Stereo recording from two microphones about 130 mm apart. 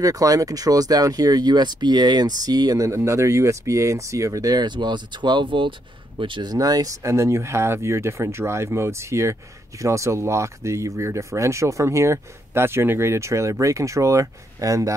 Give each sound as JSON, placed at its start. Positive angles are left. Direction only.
{"t": 0.0, "sound": "speech", "side_deg": -25}